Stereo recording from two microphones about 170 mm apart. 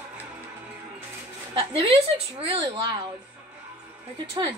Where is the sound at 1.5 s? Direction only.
30° right (ahead or behind).